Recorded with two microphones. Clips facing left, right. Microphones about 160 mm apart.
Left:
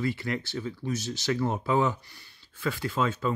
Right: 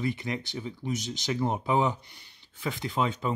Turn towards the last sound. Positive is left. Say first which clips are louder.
# left 1 dB
turn(degrees=-20)  # may be behind; listen again after turning